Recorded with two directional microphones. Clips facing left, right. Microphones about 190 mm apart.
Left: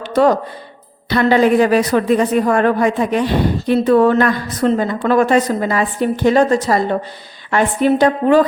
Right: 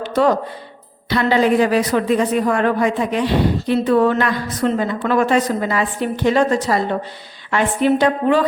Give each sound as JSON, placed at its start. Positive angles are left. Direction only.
{"t": 1.1, "sound": "speech", "side_deg": 50}